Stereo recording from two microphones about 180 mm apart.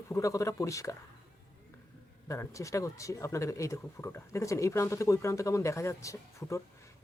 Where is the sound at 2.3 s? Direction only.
15° left (ahead or behind).